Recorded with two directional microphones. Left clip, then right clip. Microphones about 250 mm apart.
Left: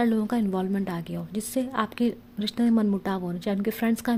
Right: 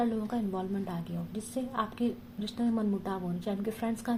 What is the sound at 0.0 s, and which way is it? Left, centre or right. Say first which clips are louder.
A woman's voice: left 6 dB; left.